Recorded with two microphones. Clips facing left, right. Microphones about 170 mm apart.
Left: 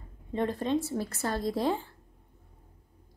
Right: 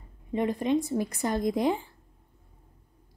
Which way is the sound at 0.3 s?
15° right (ahead or behind).